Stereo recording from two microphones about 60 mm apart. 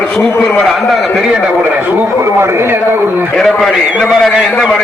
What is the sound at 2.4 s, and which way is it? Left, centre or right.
Speech, right.